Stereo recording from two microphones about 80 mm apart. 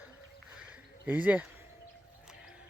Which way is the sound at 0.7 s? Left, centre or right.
Centre.